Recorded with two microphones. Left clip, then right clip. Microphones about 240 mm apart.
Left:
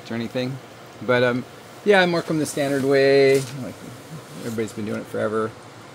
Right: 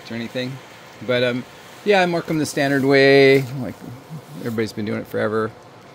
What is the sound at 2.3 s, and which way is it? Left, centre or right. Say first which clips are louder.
Speech: right 3 dB; right.